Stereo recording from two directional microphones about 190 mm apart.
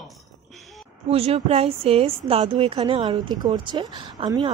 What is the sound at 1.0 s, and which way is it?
A woman's voice, 30° right (ahead or behind).